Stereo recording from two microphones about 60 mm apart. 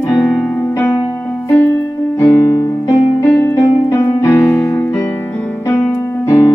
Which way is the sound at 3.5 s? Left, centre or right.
Left.